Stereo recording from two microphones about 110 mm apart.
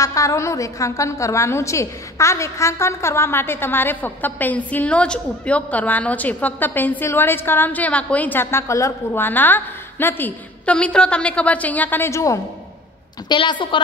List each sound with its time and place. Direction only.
0.0 s a woman's voice: 30° left (ahead or behind)
13.3 s a woman's voice: 45° left (ahead or behind)